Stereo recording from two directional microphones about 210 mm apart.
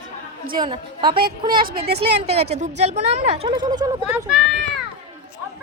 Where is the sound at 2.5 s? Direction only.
30° right (ahead or behind).